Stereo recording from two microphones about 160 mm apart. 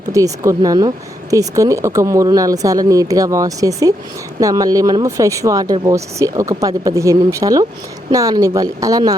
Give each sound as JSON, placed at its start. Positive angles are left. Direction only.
{"t": 0.1, "sound": "speech", "side_deg": -20}